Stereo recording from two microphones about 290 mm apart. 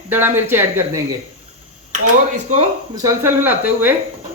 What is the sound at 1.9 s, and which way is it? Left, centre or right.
Speech, right.